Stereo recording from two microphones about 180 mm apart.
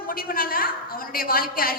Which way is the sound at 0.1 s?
55° left (ahead or behind).